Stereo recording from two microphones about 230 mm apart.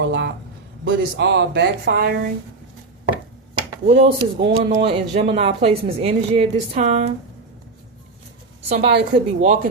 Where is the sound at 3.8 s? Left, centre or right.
Right.